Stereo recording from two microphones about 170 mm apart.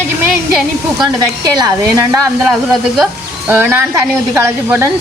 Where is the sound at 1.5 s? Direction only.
20° right (ahead or behind).